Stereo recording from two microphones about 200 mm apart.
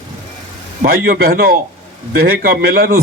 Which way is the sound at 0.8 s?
45° right (ahead or behind).